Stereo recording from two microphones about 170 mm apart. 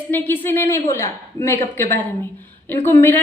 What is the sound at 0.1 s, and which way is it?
A woman's voice, 10° left (ahead or behind).